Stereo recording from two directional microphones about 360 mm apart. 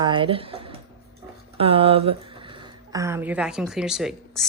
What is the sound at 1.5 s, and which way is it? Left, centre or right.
A woman's voice, centre.